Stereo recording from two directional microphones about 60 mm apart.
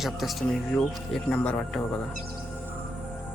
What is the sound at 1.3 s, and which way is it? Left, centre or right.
Speech, centre.